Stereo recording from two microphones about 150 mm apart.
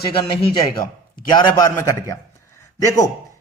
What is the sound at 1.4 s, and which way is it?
A man's voice, 20° left (ahead or behind).